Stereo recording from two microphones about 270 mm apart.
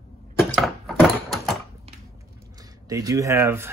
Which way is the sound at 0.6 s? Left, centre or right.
Centre.